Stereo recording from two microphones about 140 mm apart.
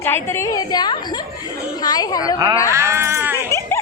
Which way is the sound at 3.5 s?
20° left (ahead or behind).